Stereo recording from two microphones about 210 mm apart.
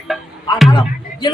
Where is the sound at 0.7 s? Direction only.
20° left (ahead or behind).